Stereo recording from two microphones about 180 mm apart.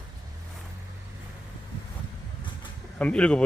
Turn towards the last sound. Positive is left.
turn(degrees=5)  # may be behind; listen again after turning